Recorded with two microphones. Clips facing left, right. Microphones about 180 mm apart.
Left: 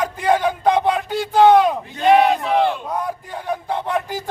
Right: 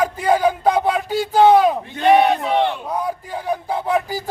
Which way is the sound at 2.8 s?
5° right (ahead or behind).